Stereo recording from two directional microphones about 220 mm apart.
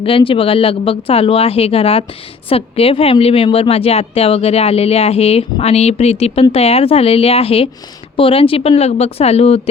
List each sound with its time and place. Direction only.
0.0 s speech: 25° left (ahead or behind)